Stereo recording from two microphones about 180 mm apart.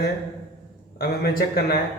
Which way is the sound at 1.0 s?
60° left (ahead or behind).